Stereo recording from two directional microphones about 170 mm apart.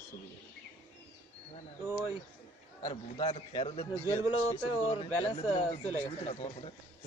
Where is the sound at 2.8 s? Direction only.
30° left (ahead or behind).